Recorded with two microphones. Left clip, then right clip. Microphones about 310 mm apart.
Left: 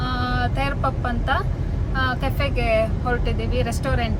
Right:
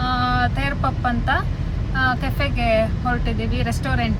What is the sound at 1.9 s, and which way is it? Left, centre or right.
Speech, centre.